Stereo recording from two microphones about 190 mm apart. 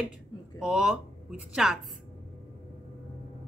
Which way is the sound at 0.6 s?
5° right (ahead or behind).